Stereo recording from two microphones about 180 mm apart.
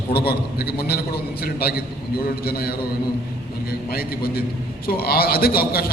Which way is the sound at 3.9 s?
55° left (ahead or behind).